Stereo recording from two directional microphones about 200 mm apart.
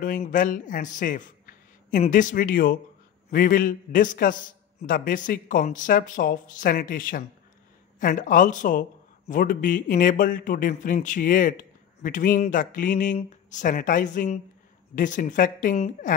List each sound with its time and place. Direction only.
0.0 s a woman's voice: 45° left (ahead or behind)